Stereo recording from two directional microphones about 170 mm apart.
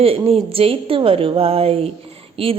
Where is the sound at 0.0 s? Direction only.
35° right (ahead or behind).